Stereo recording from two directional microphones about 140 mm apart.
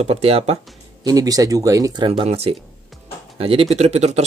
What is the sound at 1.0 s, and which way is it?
Speech, 25° right (ahead or behind).